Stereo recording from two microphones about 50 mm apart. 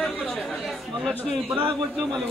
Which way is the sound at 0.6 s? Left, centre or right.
Centre.